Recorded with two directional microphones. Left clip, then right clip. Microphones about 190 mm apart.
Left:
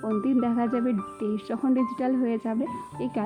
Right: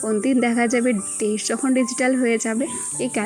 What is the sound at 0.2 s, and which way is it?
Speech, 10° right (ahead or behind).